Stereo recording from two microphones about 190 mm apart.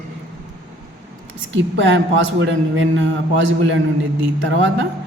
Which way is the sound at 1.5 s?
75° right (ahead or behind).